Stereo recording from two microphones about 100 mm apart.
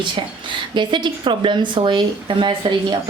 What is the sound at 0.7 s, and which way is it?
A woman's voice, 50° right (ahead or behind).